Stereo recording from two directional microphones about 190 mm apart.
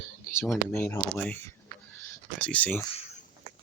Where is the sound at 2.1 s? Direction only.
5° left (ahead or behind).